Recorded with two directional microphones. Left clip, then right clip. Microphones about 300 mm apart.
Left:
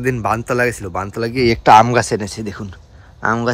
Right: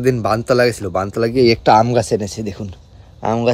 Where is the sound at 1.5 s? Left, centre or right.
Centre.